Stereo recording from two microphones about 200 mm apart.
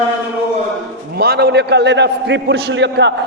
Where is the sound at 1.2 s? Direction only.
50° right (ahead or behind).